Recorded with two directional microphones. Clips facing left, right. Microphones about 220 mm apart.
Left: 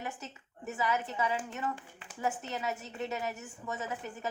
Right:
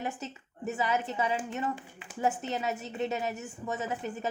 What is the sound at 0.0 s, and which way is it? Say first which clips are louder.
A woman's voice: right 5 dB; 25° right (ahead or behind).